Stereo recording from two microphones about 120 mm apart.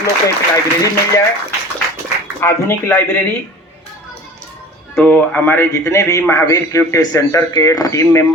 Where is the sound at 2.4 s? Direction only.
20° left (ahead or behind).